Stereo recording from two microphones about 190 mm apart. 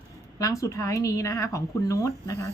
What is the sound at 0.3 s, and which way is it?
A woman's voice, 15° left (ahead or behind).